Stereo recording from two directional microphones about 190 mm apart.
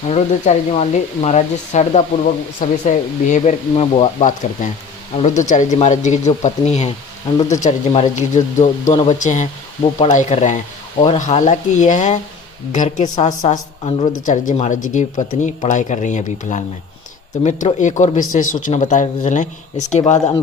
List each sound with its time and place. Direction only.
0.1 s speech: 35° left (ahead or behind)